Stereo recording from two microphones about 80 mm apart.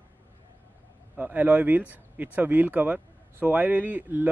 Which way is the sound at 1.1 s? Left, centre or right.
Right.